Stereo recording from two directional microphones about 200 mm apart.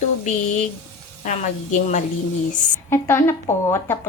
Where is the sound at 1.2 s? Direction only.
35° left (ahead or behind).